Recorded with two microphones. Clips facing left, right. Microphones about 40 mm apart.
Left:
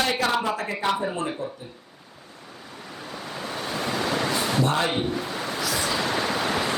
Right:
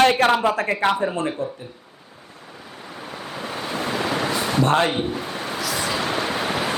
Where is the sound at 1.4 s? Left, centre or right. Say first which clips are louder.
Right 5 dB; right.